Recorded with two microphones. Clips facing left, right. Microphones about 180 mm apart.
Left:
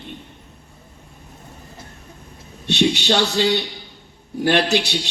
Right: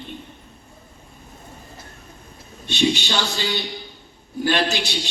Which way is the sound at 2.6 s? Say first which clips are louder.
Left 3 dB; 75° left (ahead or behind).